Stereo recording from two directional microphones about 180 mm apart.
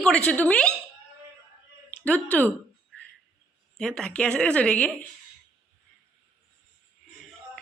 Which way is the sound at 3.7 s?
5° left (ahead or behind).